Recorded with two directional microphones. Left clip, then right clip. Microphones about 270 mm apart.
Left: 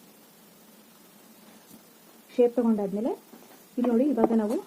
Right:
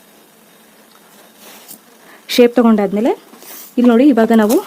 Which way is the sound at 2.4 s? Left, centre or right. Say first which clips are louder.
Right 13 dB; right.